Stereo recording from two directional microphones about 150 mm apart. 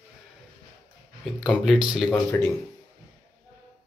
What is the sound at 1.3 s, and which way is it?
Speech, centre (ahead or behind).